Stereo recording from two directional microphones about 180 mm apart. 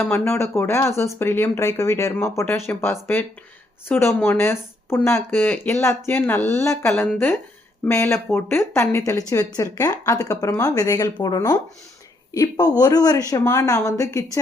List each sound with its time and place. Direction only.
0.0 s speech: 15° left (ahead or behind)